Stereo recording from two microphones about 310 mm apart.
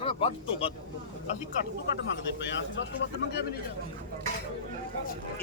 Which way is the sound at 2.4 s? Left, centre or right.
Left.